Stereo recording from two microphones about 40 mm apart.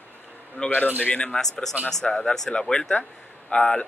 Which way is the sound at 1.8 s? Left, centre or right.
Right.